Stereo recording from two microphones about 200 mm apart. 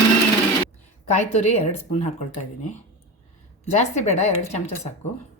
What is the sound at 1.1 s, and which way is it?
Speech, 35° left (ahead or behind).